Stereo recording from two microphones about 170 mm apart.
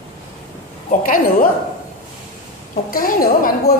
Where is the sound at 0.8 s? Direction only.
55° left (ahead or behind).